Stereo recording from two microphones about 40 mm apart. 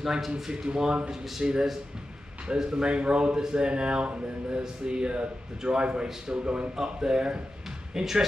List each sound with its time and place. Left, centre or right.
0.3 s a man's voice: right
7.9 s a man's voice: centre